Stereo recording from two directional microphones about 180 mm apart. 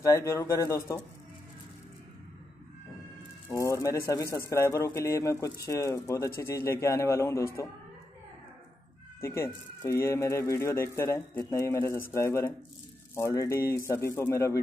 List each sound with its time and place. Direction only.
0.0 s speech: 15° left (ahead or behind)
3.4 s speech: 15° left (ahead or behind)
9.2 s speech: 15° left (ahead or behind)